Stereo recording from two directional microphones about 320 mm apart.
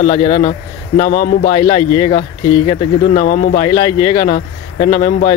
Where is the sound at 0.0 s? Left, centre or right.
Centre.